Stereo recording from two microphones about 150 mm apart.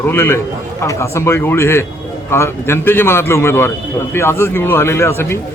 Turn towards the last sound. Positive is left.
turn(degrees=15)  # may be behind; listen again after turning